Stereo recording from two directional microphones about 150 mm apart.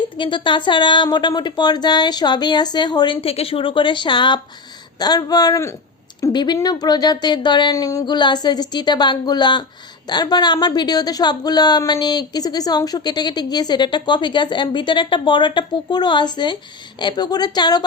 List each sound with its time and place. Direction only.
0.2 s a woman's voice: 30° left (ahead or behind)